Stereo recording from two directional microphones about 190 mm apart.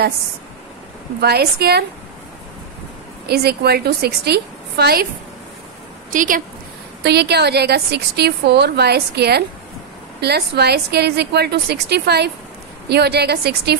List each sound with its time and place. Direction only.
1.2 s a woman's voice: 55° right (ahead or behind)
3.3 s a woman's voice: 55° right (ahead or behind)
6.1 s a woman's voice: 45° right (ahead or behind)
7.0 s a woman's voice: 60° right (ahead or behind)